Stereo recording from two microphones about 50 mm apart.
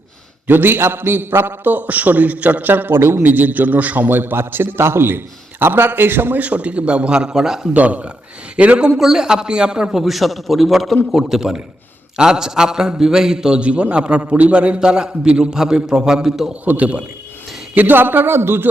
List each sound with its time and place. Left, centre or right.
0.4 s a man's voice: right
3.2 s a man's voice: right
4.2 s a man's voice: right
6.4 s a man's voice: right
7.3 s a man's voice: centre
7.7 s a man's voice: right
9.0 s a man's voice: centre
9.9 s a man's voice: centre
14.2 s a man's voice: right; by 16.5 s centre
16.6 s a man's voice: right
17.7 s a man's voice: right